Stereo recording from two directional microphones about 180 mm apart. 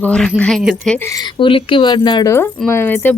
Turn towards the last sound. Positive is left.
turn(degrees=10)  # may be behind; listen again after turning